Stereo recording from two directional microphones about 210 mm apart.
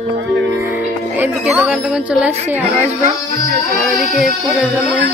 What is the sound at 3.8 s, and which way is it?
A woman's voice, centre (ahead or behind).